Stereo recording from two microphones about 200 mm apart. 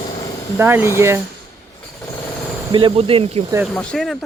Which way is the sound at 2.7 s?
25° right (ahead or behind).